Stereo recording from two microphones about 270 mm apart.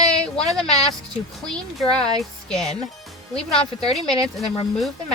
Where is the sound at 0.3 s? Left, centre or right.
Centre.